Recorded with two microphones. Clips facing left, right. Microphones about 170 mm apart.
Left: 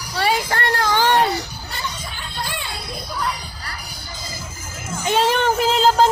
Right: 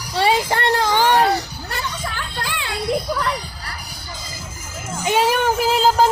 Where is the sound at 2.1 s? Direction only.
90° right.